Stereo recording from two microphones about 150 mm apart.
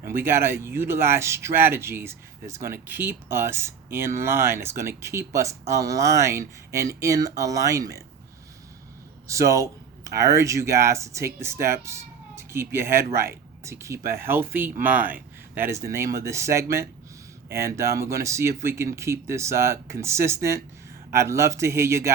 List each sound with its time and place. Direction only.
0.2 s speech: 15° right (ahead or behind)
9.2 s speech: 20° right (ahead or behind)